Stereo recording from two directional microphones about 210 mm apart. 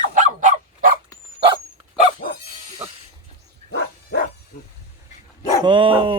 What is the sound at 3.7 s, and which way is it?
Dog, 45° left (ahead or behind).